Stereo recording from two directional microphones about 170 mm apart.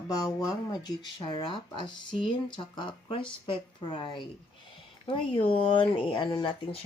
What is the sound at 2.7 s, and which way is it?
Speech, 30° left (ahead or behind).